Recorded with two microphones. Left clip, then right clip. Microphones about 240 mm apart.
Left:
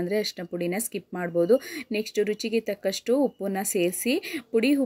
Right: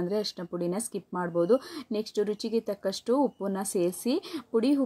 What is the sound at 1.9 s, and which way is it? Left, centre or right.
Speech, centre.